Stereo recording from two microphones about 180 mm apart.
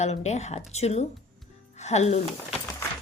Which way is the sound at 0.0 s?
40° left (ahead or behind).